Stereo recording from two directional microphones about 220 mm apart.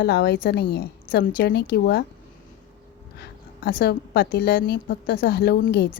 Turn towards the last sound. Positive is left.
turn(degrees=45)  # may be behind; listen again after turning